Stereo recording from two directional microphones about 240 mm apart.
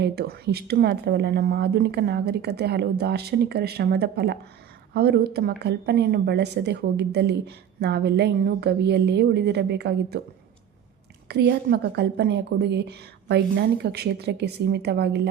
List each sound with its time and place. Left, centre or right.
0.0 s a woman's voice: right
11.3 s a woman's voice: right